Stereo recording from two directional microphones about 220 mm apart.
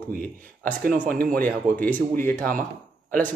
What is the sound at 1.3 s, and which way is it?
Speech, 5° left (ahead or behind).